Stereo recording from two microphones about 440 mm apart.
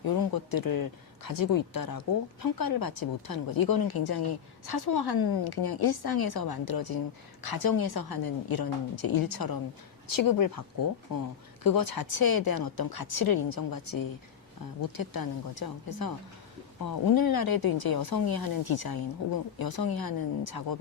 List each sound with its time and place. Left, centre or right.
0.0 s speech: left